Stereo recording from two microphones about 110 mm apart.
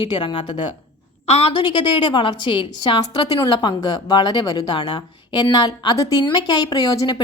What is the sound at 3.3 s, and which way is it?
A woman's voice, 40° left (ahead or behind).